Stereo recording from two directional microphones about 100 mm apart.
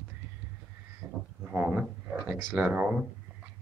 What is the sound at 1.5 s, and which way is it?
Speech, 15° right (ahead or behind).